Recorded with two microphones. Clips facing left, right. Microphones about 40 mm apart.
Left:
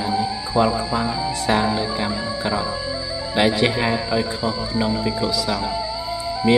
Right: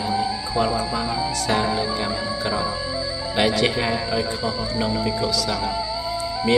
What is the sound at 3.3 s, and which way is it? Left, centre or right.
Speech, centre.